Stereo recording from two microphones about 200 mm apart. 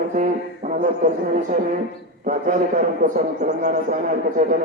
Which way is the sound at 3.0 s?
40° right (ahead or behind).